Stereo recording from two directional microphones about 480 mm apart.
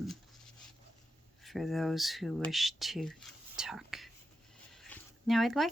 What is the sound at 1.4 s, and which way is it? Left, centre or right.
Speech, centre.